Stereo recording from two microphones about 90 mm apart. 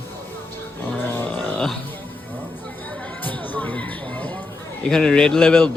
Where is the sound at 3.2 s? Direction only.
20° left (ahead or behind).